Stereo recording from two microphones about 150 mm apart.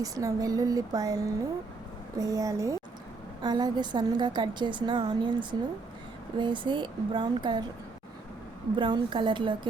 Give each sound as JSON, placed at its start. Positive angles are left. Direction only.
{"t": 0.0, "sound": "a woman's voice", "side_deg": -20}
{"t": 8.7, "sound": "speech", "side_deg": -30}